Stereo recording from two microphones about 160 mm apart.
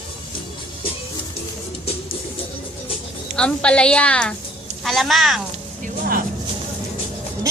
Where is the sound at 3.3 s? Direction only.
5° left (ahead or behind).